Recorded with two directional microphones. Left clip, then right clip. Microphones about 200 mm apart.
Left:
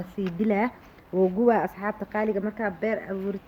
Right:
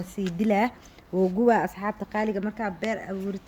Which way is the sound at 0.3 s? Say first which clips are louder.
Right 2 dB; 50° right (ahead or behind).